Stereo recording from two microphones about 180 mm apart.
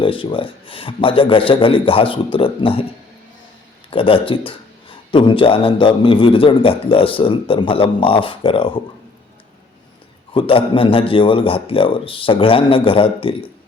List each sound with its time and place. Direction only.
0.0 s a man's voice: 30° left (ahead or behind)
3.8 s a man's voice: 30° left (ahead or behind)
10.3 s a man's voice: 30° left (ahead or behind)